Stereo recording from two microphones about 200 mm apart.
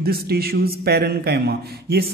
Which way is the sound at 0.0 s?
50° right (ahead or behind).